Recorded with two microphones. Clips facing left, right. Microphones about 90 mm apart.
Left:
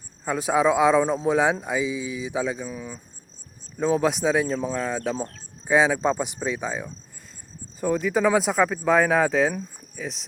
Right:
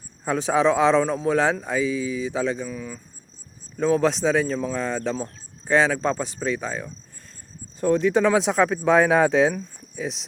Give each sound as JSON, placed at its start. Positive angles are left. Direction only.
{"t": 0.3, "sound": "speech", "side_deg": 5}
{"t": 2.6, "sound": "speech", "side_deg": 20}
{"t": 3.8, "sound": "speech", "side_deg": 10}